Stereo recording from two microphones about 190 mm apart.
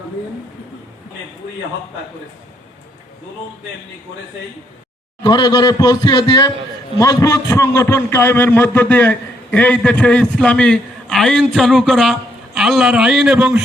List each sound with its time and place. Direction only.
5.2 s a man's voice: 20° left (ahead or behind); by 13.6 s 5° right (ahead or behind)